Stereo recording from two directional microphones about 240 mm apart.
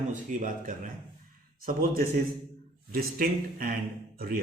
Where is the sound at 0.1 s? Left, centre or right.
Right.